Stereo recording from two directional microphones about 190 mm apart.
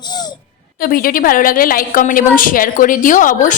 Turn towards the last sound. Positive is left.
turn(degrees=45)  # may be behind; listen again after turning